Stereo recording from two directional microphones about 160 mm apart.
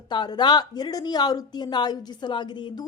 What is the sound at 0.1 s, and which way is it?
A woman's voice, 30° left (ahead or behind).